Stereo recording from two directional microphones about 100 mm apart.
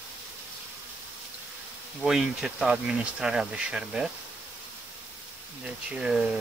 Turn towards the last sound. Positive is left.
turn(degrees=-10)  # may be behind; listen again after turning